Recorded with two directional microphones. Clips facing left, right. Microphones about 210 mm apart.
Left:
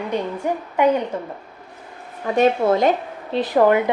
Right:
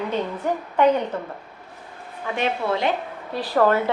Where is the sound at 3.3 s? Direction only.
20° left (ahead or behind).